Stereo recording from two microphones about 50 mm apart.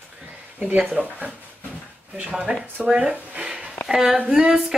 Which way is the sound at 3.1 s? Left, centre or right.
Right.